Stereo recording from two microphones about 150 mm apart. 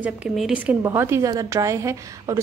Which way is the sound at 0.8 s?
15° right (ahead or behind).